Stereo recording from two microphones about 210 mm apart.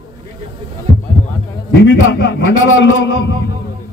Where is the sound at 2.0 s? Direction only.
75° left (ahead or behind).